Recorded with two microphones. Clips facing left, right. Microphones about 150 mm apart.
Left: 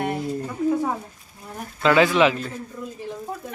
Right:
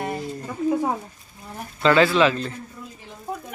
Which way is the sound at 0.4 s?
15° right (ahead or behind).